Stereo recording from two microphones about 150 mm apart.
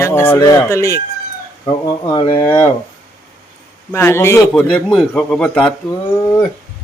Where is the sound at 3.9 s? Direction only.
15° left (ahead or behind).